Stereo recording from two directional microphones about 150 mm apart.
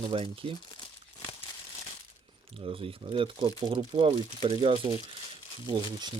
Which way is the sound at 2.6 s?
35° right (ahead or behind).